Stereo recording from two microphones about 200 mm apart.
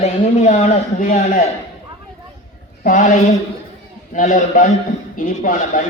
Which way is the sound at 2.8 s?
40° left (ahead or behind).